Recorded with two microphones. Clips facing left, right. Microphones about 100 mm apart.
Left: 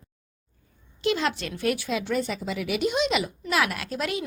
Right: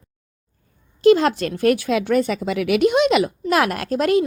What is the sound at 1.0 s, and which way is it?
Speech, 45° right (ahead or behind).